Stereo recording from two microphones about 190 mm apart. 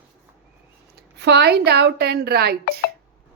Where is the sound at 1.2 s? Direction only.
60° right (ahead or behind).